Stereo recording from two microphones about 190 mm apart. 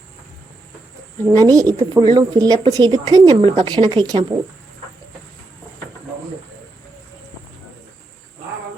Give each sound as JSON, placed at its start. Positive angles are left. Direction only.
{"t": 1.2, "sound": "speech", "side_deg": -20}